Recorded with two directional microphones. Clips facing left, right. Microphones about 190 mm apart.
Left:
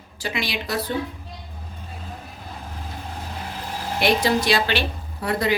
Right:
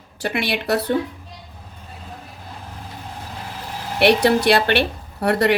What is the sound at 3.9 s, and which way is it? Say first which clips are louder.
A woman's voice: right 5 dB; 65° right (ahead or behind).